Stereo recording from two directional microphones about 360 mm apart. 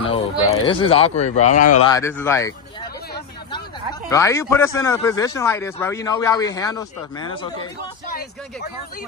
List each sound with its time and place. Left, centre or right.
0.0 s speech: centre
1.9 s speech: centre
4.1 s speech: centre